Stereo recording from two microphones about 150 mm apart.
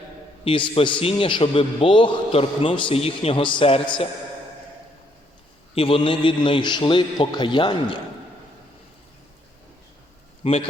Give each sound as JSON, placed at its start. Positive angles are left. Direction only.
{"t": 0.4, "sound": "a man's voice", "side_deg": 35}
{"t": 5.7, "sound": "a man's voice", "side_deg": 40}
{"t": 10.4, "sound": "a man's voice", "side_deg": 40}